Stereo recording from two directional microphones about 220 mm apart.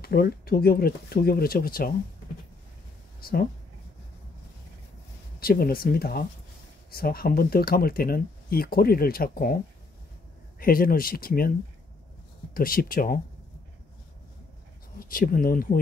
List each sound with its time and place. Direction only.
0.0 s speech: 45° left (ahead or behind)
3.2 s a sound: 40° left (ahead or behind)
5.4 s speech: 40° left (ahead or behind)
10.6 s speech: 40° left (ahead or behind)
12.5 s speech: 40° left (ahead or behind)
15.0 s speech: 40° left (ahead or behind)